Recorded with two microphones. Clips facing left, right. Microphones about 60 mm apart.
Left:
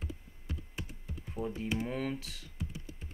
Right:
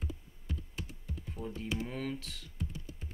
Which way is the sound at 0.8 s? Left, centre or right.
Centre.